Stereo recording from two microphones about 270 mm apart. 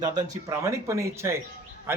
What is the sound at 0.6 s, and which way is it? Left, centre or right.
Speech, centre.